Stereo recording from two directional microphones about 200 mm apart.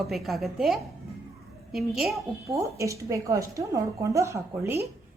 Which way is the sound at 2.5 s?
15° right (ahead or behind).